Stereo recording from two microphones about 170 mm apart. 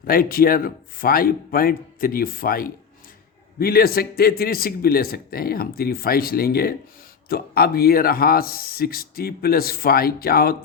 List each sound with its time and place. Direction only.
0.0 s speech: 60° left (ahead or behind)